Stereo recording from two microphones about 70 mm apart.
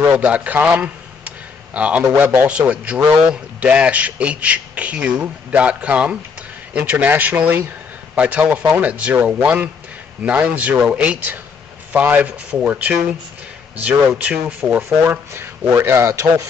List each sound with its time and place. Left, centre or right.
0.1 s a man's voice: right
8.1 s speech: centre
14.8 s speech: right